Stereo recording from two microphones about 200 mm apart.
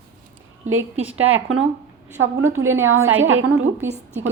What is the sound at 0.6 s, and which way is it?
Speech, 90° right.